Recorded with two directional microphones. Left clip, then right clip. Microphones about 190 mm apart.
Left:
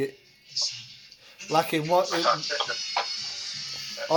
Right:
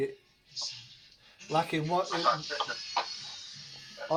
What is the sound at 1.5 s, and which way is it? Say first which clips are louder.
Speech: left 6 dB; 50° left (ahead or behind).